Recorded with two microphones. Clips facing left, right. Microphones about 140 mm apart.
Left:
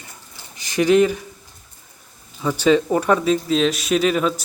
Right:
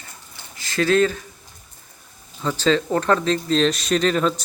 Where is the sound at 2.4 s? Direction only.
10° left (ahead or behind).